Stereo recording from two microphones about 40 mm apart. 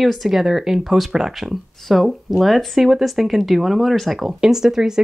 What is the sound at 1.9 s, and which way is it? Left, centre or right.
Speech, centre.